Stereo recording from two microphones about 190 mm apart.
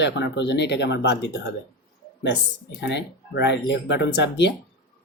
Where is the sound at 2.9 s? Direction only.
65° left (ahead or behind).